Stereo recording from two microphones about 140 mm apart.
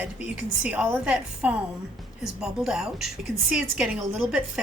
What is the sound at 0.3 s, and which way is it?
A woman's voice, 5° right (ahead or behind).